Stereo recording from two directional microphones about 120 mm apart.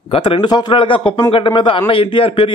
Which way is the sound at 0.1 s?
45° left (ahead or behind).